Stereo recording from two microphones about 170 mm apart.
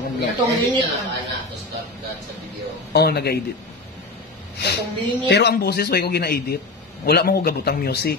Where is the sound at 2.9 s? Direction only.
70° left (ahead or behind).